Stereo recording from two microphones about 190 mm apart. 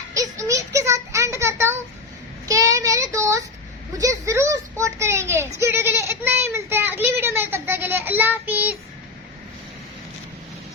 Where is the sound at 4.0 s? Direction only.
15° right (ahead or behind).